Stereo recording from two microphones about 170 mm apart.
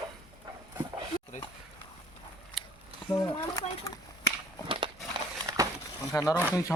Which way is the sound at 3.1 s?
15° left (ahead or behind).